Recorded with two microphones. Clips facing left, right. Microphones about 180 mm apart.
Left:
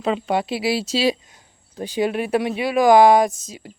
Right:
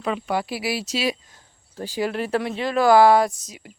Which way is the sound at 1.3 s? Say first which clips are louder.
Left 2 dB; 20° left (ahead or behind).